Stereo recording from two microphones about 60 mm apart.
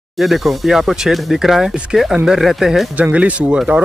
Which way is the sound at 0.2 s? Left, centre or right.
Centre.